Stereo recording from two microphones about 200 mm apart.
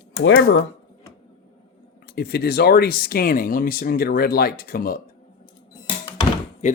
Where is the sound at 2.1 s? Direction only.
50° left (ahead or behind).